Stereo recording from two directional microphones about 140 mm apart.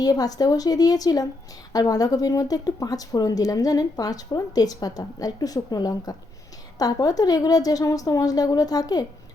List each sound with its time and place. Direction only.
0.0 s speech: 25° left (ahead or behind)